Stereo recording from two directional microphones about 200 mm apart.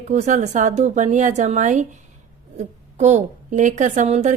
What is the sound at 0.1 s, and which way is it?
A woman's voice, 35° right (ahead or behind).